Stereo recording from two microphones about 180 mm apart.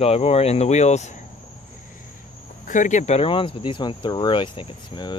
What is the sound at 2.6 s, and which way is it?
Speech, 45° left (ahead or behind).